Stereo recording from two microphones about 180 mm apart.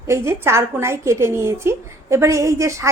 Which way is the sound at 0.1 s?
15° right (ahead or behind).